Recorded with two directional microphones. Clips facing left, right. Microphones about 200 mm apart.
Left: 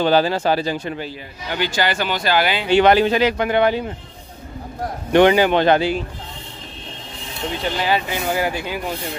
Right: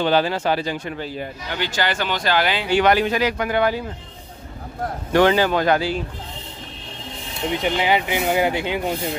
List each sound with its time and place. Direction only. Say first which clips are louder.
0.0 s speech: left 2 dB; 35° left (ahead or behind)
1.5 s speech: left 3 dB; 10° left (ahead or behind)
2.7 s a man's voice: left 4 dB; 25° left (ahead or behind)
5.1 s a man's voice: left 3 dB; 20° left (ahead or behind)
7.5 s speech: right 1 dB; 20° right (ahead or behind)